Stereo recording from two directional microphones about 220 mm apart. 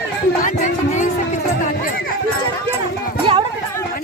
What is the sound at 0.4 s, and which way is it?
Music, 35° left (ahead or behind).